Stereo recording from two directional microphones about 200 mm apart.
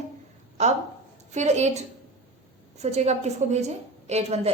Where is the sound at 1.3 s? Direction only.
35° right (ahead or behind).